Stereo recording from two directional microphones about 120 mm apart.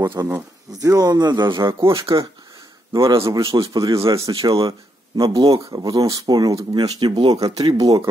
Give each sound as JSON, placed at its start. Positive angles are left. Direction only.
{"t": 0.0, "sound": "speech", "side_deg": -20}
{"t": 2.9, "sound": "speech", "side_deg": -30}
{"t": 5.1, "sound": "speech", "side_deg": -45}
{"t": 5.7, "sound": "speech", "side_deg": -35}